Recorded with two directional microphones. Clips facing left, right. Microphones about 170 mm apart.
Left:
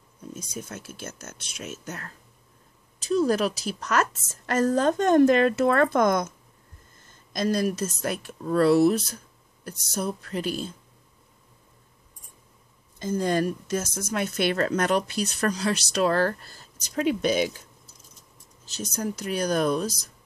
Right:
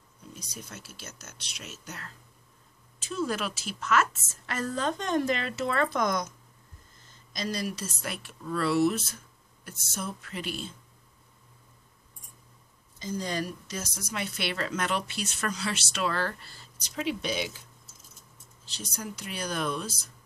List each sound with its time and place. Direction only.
0.3 s a woman's voice: 50° left (ahead or behind)
3.0 s a woman's voice: 40° left (ahead or behind)
13.0 s a woman's voice: 50° left (ahead or behind)
18.7 s a woman's voice: 45° left (ahead or behind)